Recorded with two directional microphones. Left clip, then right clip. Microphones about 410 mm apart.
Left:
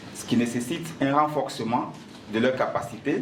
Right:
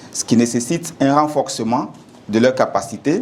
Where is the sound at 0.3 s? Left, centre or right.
Right.